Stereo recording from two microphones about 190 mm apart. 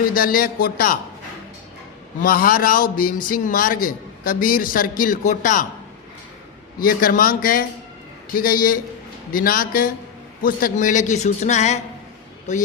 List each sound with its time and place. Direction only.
0.1 s a man's voice: 50° left (ahead or behind)
2.2 s a man's voice: 50° left (ahead or behind)
6.7 s a man's voice: 50° left (ahead or behind)